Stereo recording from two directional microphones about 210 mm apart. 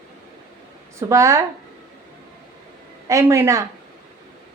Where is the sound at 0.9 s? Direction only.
15° right (ahead or behind).